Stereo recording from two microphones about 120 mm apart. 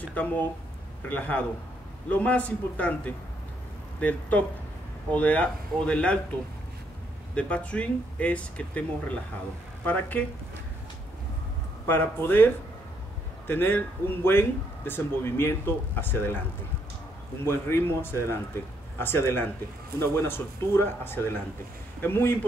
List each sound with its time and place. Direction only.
0.0 s speech: 15° left (ahead or behind)
7.3 s speech: 10° left (ahead or behind)
11.9 s speech: 15° left (ahead or behind)
13.5 s speech: 15° left (ahead or behind)
17.5 s a man's voice: 20° left (ahead or behind)